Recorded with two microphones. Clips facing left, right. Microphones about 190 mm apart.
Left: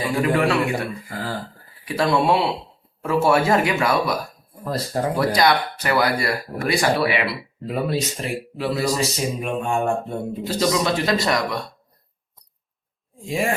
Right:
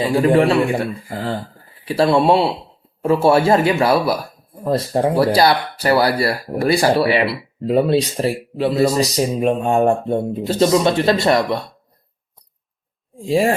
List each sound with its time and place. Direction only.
0.0 s speech: 30° right (ahead or behind)
13.2 s speech: 30° right (ahead or behind)